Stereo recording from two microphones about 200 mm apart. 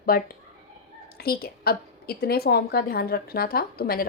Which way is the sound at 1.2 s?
50° left (ahead or behind).